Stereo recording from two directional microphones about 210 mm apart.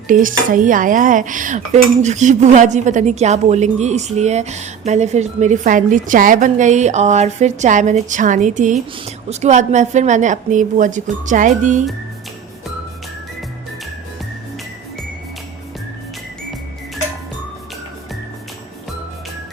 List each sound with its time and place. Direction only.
0.1 s a woman's voice: 40° right (ahead or behind)